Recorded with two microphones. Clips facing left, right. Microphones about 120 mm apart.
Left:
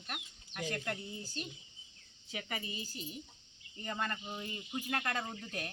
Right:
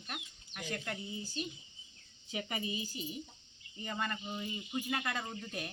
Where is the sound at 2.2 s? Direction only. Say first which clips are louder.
Right 3 dB; 20° right (ahead or behind).